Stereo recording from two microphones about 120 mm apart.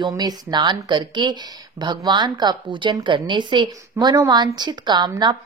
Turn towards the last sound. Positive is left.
turn(degrees=-40)  # may be behind; listen again after turning